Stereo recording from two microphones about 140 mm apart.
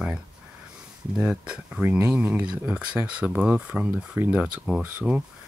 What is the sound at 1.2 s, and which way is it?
Speech, 10° right (ahead or behind).